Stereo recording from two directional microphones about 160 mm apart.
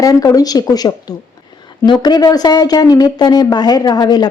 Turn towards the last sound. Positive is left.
turn(degrees=25)  # may be behind; listen again after turning